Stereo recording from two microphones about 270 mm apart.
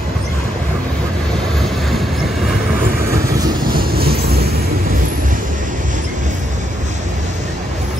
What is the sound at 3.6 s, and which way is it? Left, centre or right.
Vehicle, right.